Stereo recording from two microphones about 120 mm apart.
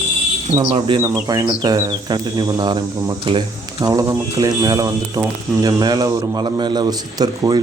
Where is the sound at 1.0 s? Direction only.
30° right (ahead or behind).